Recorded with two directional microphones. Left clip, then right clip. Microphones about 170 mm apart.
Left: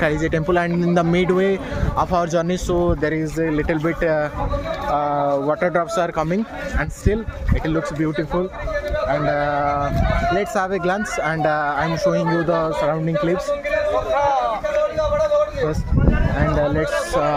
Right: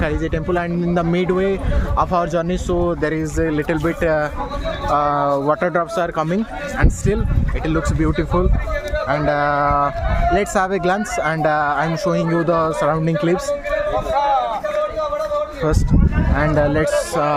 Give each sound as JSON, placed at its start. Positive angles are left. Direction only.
{"t": 0.0, "sound": "speech", "side_deg": 10}
{"t": 2.0, "sound": "a man's voice", "side_deg": -10}
{"t": 3.0, "sound": "speech", "side_deg": -20}
{"t": 5.7, "sound": "a man's voice", "side_deg": -10}
{"t": 9.1, "sound": "speech", "side_deg": -30}
{"t": 16.4, "sound": "a man's voice", "side_deg": -35}